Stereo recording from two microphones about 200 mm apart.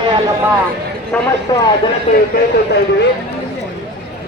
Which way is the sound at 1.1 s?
5° left (ahead or behind).